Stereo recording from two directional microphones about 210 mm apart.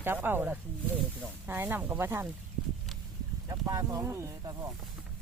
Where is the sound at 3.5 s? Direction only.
15° right (ahead or behind).